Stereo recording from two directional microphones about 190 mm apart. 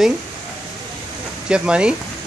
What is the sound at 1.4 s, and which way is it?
Speech, 5° right (ahead or behind).